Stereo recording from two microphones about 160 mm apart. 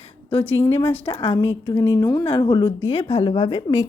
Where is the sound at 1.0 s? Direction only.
35° left (ahead or behind).